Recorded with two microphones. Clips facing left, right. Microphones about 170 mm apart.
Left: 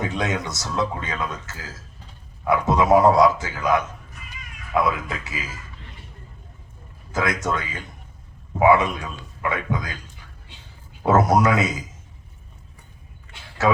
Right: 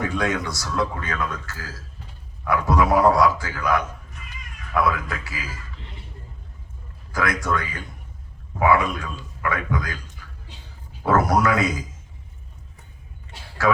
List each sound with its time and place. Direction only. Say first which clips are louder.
0.0 s a man's voice: right 1 dB; 20° left (ahead or behind)
7.1 s a man's voice: even; 20° left (ahead or behind)
11.0 s a man's voice: left 2 dB; 20° left (ahead or behind)